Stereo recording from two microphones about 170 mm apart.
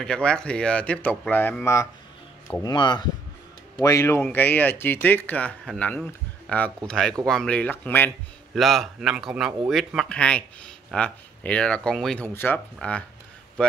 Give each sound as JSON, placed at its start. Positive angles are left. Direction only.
{"t": 0.0, "sound": "speech", "side_deg": 5}
{"t": 8.5, "sound": "speech", "side_deg": 0}